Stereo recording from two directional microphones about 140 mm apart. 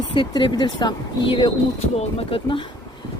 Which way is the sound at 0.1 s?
35° left (ahead or behind).